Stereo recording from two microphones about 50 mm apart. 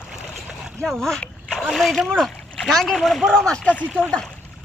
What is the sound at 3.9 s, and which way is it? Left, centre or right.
Speech, centre.